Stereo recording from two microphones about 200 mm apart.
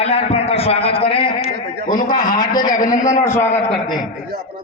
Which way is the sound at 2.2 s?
40° left (ahead or behind).